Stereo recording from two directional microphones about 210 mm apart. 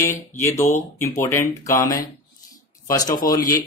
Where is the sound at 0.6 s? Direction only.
35° left (ahead or behind).